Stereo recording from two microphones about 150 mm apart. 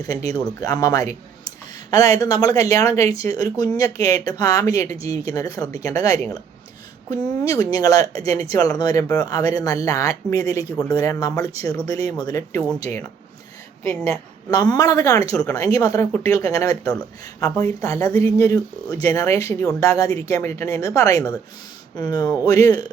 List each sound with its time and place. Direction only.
0.6 s a woman's voice: 25° left (ahead or behind)
14.5 s a woman's voice: 25° left (ahead or behind)